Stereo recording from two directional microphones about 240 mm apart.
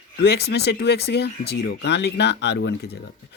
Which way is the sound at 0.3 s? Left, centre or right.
Left.